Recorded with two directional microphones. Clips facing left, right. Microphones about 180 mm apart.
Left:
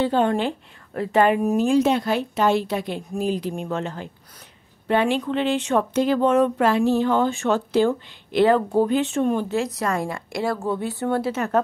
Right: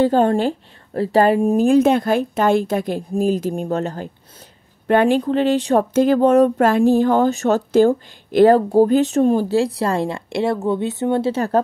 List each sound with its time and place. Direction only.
0.0 s speech: 40° right (ahead or behind)
1.7 s speech: 50° right (ahead or behind); by 11.6 s 30° right (ahead or behind)